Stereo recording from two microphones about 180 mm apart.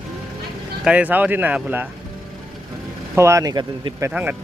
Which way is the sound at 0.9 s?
10° right (ahead or behind).